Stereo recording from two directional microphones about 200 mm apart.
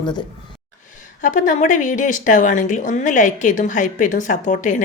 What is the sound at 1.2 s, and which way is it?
Speech, 40° left (ahead or behind).